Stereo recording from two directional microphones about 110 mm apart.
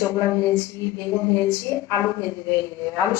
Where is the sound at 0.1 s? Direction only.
30° left (ahead or behind).